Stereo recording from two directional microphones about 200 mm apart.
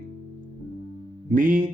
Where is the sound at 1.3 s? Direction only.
40° right (ahead or behind).